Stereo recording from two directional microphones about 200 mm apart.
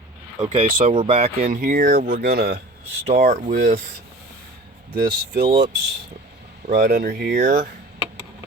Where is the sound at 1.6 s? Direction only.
45° right (ahead or behind).